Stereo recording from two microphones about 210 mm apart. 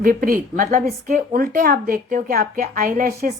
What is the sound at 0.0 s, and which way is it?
A woman's voice, 45° right (ahead or behind).